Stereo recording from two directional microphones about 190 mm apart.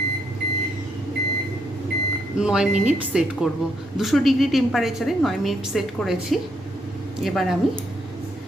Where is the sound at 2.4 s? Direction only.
5° right (ahead or behind).